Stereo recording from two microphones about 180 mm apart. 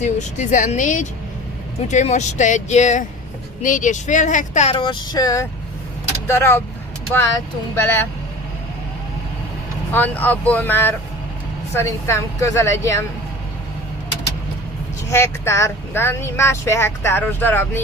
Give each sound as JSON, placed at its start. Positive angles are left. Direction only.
{"t": 0.0, "sound": "speech", "side_deg": 45}
{"t": 7.7, "sound": "speech", "side_deg": 10}
{"t": 9.9, "sound": "speech", "side_deg": 10}
{"t": 15.0, "sound": "speech", "side_deg": 15}